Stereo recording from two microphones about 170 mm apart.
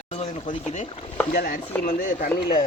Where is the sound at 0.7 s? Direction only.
35° left (ahead or behind).